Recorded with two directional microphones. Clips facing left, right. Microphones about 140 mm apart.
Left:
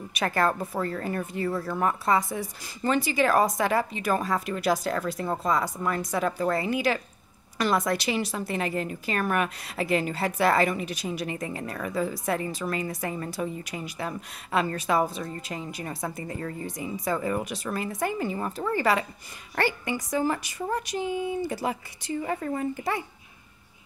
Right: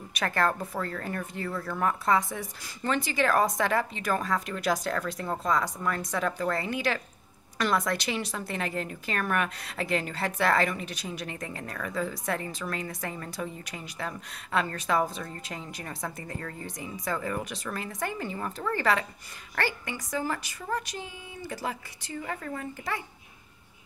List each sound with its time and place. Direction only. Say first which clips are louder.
0.1 s a woman's voice: left 2 dB; 5° left (ahead or behind)